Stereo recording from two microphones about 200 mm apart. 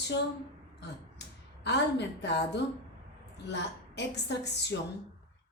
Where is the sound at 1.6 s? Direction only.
60° left (ahead or behind).